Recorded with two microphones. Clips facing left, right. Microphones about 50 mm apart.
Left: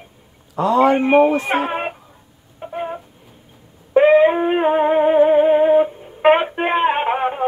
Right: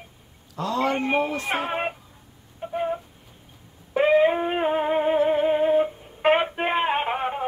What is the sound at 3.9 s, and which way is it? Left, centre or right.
Wind instrument, centre.